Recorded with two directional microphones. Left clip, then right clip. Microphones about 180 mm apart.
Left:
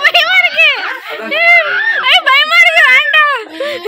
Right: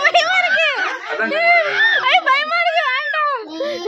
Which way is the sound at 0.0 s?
15° right (ahead or behind).